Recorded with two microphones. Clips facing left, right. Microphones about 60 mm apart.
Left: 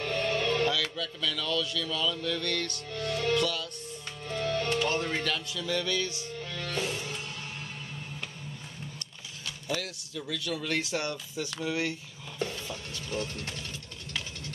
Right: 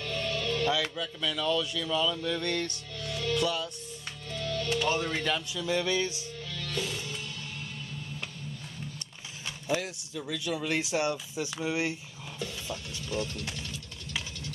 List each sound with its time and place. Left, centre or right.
0.0 s music: left
0.7 s speech: centre
2.9 s music: left
3.4 s speech: right
4.3 s music: left
5.2 s speech: centre
6.2 s music: left
9.7 s speech: right
12.4 s music: left